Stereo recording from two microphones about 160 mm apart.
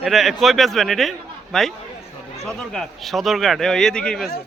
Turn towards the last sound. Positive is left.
turn(degrees=5)  # may be behind; listen again after turning